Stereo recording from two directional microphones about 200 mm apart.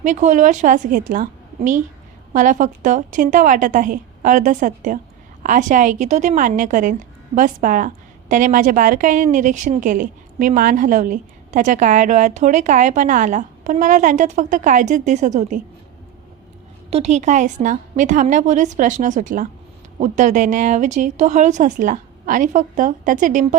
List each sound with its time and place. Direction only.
0.0 s a woman's voice: 40° right (ahead or behind)
16.9 s a woman's voice: 35° right (ahead or behind)